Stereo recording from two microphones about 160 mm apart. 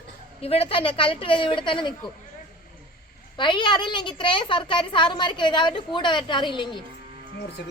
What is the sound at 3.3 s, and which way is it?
A woman's voice, 30° left (ahead or behind).